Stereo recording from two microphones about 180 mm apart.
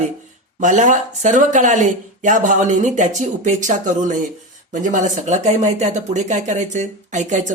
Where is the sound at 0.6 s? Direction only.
45° right (ahead or behind).